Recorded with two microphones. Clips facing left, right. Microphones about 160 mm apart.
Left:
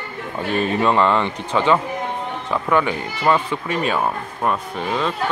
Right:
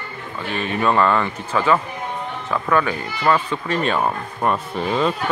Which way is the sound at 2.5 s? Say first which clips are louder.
Left 1 dB; 20° left (ahead or behind).